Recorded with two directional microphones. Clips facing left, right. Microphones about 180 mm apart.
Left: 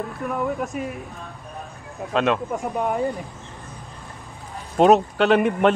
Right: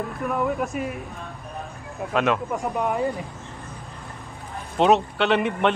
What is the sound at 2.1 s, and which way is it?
Speech, 20° left (ahead or behind).